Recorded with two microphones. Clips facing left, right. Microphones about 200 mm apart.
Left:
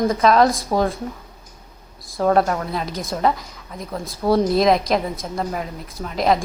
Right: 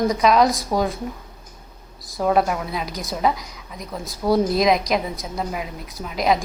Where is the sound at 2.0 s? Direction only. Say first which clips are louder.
Left 2 dB; 5° right (ahead or behind).